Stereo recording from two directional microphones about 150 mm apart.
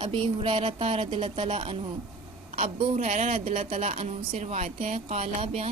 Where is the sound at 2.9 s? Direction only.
50° right (ahead or behind).